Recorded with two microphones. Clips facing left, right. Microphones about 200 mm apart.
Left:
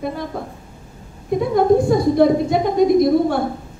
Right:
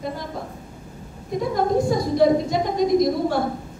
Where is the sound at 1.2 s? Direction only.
60° left (ahead or behind).